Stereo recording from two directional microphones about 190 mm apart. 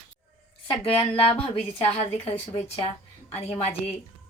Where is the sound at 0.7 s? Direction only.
30° left (ahead or behind).